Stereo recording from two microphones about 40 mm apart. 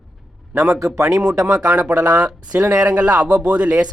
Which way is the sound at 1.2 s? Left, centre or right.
Centre.